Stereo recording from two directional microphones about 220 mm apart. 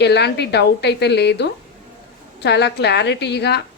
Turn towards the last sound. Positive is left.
turn(degrees=50)  # may be behind; listen again after turning